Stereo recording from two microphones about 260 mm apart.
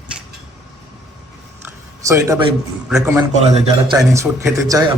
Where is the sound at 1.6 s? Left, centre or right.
Centre.